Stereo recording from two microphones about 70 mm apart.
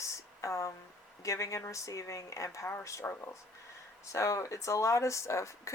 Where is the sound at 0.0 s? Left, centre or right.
Left.